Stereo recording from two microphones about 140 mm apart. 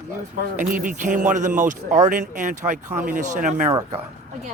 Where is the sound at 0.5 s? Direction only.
70° right (ahead or behind).